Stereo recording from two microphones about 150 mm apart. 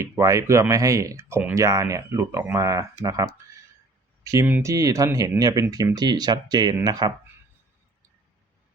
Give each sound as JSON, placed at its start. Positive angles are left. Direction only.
{"t": 0.0, "sound": "speech", "side_deg": -20}